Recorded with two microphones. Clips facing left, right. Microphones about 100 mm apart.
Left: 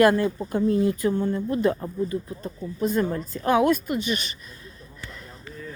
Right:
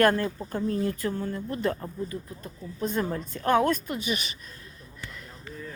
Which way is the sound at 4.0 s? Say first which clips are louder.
Left 4 dB; 5° right (ahead or behind).